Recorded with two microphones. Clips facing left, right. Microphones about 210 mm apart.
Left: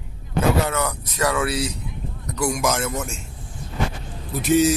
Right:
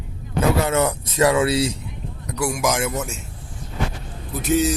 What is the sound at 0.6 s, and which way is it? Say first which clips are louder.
Speech: right 5 dB; 25° right (ahead or behind).